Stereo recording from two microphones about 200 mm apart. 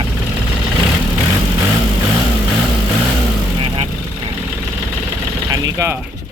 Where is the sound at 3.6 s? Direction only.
30° right (ahead or behind).